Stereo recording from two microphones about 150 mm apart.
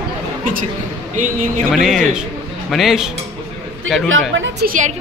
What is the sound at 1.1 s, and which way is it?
Speech, 60° right (ahead or behind).